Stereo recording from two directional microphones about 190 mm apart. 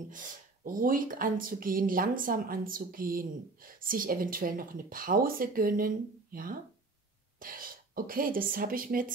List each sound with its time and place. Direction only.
0.1 s speech: 45° right (ahead or behind)